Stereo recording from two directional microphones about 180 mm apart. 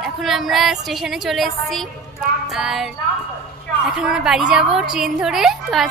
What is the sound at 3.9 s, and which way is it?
A woman's voice, 5° right (ahead or behind).